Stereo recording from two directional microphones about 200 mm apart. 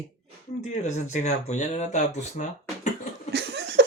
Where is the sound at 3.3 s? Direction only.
60° right (ahead or behind).